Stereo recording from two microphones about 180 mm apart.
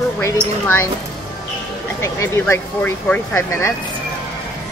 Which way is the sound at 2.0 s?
15° left (ahead or behind).